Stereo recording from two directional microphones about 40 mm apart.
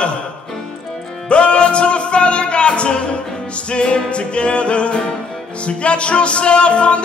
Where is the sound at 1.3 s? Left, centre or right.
Left.